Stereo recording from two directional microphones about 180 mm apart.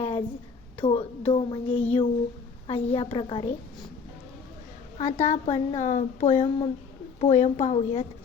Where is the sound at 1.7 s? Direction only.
5° left (ahead or behind).